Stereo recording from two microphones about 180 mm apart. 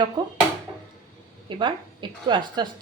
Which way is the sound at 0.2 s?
25° right (ahead or behind).